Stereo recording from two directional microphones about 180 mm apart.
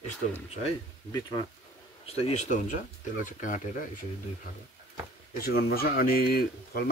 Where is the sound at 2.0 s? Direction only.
35° left (ahead or behind).